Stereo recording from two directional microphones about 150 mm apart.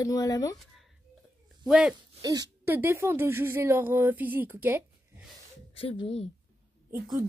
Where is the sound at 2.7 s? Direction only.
15° right (ahead or behind).